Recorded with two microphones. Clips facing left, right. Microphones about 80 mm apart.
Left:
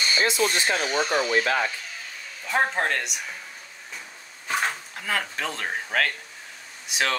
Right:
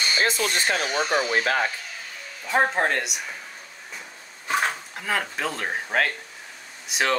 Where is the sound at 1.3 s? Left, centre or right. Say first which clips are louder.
Even; right.